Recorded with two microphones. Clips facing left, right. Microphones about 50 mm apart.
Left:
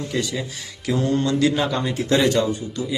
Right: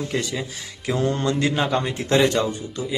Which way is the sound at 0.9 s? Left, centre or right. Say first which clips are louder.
Left 1 dB; right.